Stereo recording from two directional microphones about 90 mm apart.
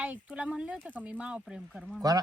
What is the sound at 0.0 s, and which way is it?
Speech, 15° right (ahead or behind).